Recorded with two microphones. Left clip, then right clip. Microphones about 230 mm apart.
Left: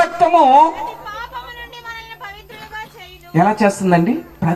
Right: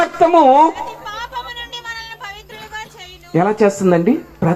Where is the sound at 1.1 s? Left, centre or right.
Right.